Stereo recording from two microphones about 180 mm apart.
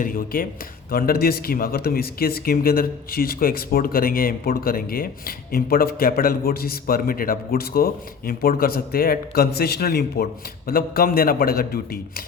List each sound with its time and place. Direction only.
0.0 s speech: 50° left (ahead or behind)